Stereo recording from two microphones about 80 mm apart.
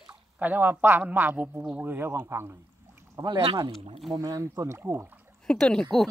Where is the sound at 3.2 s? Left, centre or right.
Right.